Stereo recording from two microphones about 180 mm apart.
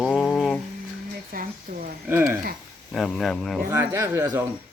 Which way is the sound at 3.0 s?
Centre (ahead or behind).